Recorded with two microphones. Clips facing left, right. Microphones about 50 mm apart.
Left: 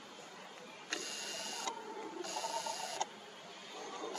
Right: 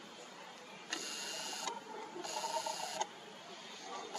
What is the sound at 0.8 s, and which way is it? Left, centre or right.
Printer, right.